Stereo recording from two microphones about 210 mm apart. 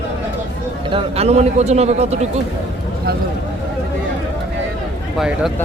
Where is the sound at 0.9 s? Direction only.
30° right (ahead or behind).